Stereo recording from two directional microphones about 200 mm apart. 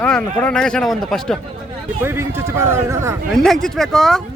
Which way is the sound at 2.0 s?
10° right (ahead or behind).